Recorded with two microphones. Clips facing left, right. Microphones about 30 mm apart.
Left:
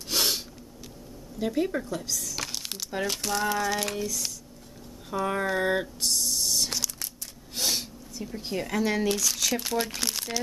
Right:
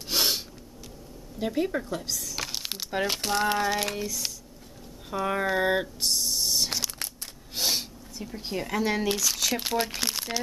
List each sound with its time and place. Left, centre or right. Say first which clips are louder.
0.1 s snort: right 1 dB; centre
1.4 s speech: even; centre; by 3.4 s right
3.6 s speech: right 1 dB; centre
5.1 s a sound: right 1 dB; centre
9.8 s speech: right 1 dB; centre